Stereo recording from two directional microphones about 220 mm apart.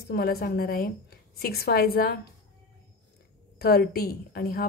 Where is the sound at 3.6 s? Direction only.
45° left (ahead or behind).